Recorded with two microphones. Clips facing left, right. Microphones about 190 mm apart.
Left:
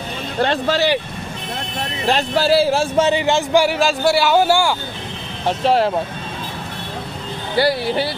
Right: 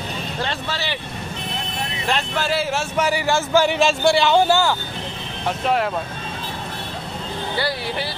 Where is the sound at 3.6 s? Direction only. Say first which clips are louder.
Left 1 dB; 5° left (ahead or behind).